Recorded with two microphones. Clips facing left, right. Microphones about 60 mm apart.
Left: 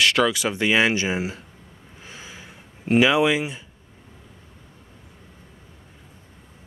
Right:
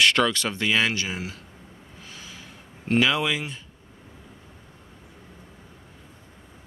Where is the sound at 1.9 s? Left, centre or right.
Left.